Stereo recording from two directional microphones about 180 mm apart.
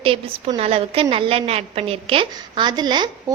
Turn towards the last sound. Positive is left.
turn(degrees=-25)  # may be behind; listen again after turning